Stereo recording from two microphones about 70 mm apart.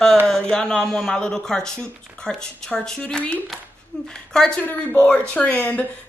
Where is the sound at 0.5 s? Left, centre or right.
Centre.